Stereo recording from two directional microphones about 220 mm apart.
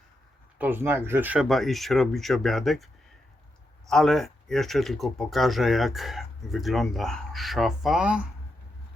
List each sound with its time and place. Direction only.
0.6 s speech: 10° right (ahead or behind)